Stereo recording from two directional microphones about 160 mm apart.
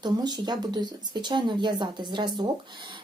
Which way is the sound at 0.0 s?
25° right (ahead or behind).